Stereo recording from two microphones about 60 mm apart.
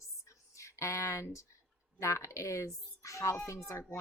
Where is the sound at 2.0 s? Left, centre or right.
Left.